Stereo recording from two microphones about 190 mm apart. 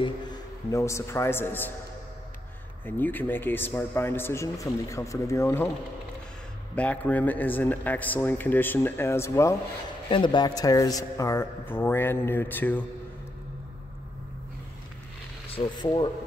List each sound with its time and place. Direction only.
0.0 s a man's voice: 20° left (ahead or behind)
2.8 s a man's voice: 10° left (ahead or behind)
6.7 s a man's voice: 5° left (ahead or behind)
10.0 s a man's voice: 25° left (ahead or behind); by 12.8 s 10° left (ahead or behind)
15.5 s speech: 25° left (ahead or behind)